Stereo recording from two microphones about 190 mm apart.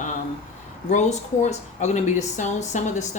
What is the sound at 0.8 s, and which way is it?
Speech, 40° left (ahead or behind).